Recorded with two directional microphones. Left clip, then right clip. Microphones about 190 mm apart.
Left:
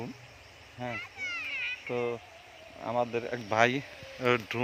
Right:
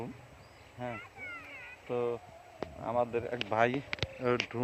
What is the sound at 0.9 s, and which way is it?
Children playing, 40° left (ahead or behind).